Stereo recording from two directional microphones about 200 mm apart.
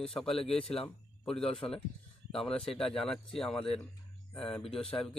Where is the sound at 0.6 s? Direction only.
30° left (ahead or behind).